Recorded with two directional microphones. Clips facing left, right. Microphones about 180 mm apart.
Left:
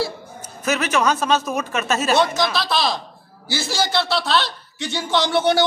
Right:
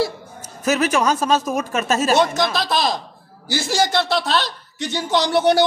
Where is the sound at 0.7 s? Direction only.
40° right (ahead or behind).